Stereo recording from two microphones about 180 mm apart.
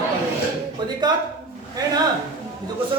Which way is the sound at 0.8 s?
25° right (ahead or behind).